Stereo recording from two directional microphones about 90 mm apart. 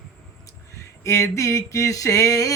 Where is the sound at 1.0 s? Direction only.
35° left (ahead or behind).